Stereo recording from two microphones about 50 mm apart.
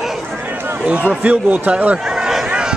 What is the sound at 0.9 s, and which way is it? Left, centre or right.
A man's voice, right.